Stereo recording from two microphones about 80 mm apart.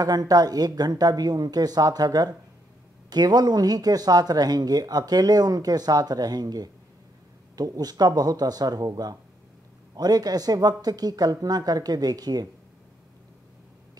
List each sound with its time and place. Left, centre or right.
0.0 s speech: right